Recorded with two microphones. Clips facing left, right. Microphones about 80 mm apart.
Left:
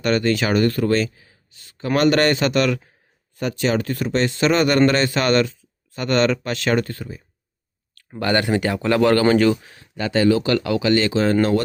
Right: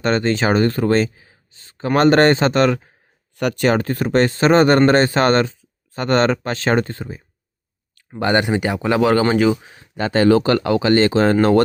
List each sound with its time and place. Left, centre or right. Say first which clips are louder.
0.0 s speech: right 2 dB; right
3.3 s speech: right 4 dB; right
8.2 s speech: right 2 dB; right
9.6 s speech: right 3 dB; right